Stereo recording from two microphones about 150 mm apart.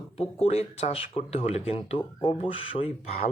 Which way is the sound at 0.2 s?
40° left (ahead or behind).